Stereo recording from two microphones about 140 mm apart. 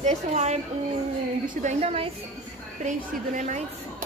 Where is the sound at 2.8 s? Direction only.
60° right (ahead or behind).